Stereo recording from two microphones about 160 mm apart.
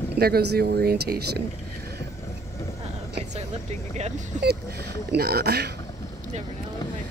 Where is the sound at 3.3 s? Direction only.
45° right (ahead or behind).